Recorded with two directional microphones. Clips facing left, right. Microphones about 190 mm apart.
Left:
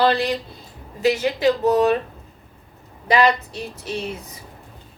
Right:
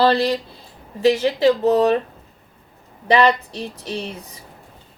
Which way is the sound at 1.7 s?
35° right (ahead or behind).